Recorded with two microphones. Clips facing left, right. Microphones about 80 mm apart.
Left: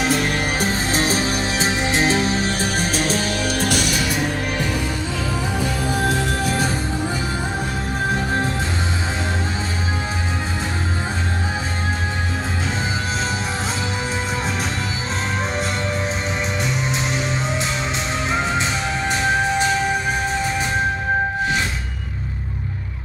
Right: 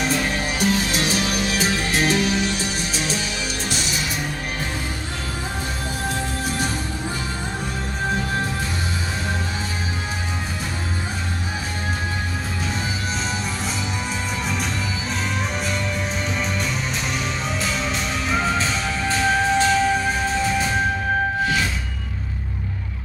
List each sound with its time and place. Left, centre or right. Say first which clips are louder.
0.6 s music: right 3 dB; left
18.3 s music: even; left